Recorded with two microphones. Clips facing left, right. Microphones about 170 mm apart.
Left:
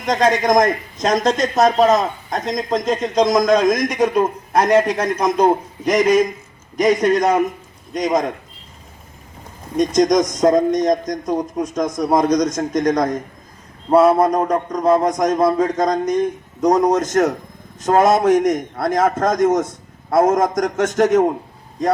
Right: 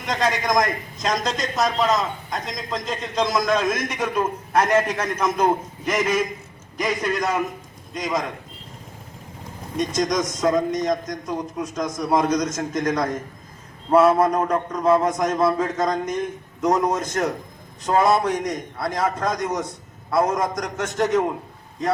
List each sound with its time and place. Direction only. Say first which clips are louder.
0.0 s a man's voice: left 7 dB; 45° left (ahead or behind)
10.0 s a man's voice: left 8 dB; 45° left (ahead or behind)
14.2 s a man's voice: left 3 dB; 35° left (ahead or behind)